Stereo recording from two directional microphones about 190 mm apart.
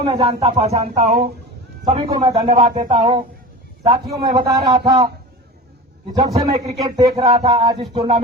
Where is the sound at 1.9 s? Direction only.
25° right (ahead or behind).